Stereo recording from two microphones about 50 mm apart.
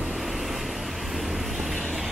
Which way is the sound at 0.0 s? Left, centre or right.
Centre.